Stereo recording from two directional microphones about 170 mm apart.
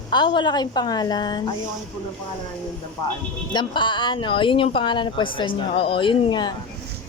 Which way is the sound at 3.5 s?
30° left (ahead or behind).